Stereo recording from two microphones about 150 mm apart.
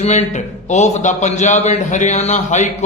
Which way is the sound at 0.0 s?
50° left (ahead or behind).